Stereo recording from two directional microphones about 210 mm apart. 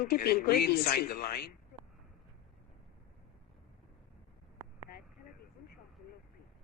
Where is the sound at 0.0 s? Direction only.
45° left (ahead or behind).